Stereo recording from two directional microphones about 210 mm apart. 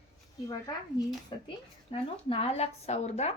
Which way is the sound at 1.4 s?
25° left (ahead or behind).